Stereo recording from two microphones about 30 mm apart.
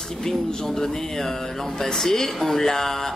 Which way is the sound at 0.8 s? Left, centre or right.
Centre.